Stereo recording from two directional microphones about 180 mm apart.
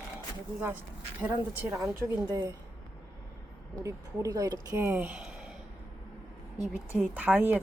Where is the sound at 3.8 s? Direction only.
20° right (ahead or behind).